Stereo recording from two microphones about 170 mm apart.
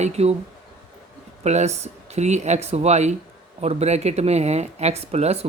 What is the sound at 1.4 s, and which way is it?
Speech, 40° right (ahead or behind).